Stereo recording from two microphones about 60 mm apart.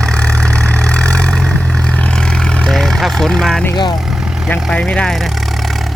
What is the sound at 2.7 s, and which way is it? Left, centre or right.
Speech, centre.